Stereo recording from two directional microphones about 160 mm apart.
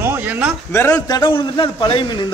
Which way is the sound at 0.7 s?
15° left (ahead or behind).